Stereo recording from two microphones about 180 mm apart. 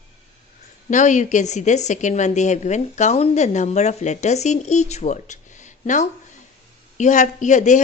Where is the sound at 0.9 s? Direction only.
40° left (ahead or behind).